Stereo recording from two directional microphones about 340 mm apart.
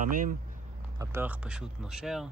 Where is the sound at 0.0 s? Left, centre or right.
Right.